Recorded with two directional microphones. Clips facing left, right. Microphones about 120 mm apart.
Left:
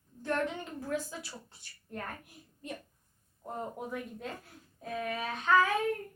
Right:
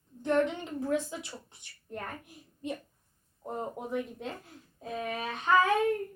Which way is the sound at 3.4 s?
20° right (ahead or behind).